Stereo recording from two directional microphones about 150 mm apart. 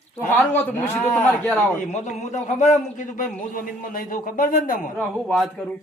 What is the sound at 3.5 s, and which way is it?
A man's voice, 70° left (ahead or behind).